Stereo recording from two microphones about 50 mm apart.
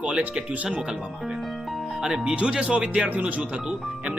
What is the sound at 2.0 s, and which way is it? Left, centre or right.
Speech, centre.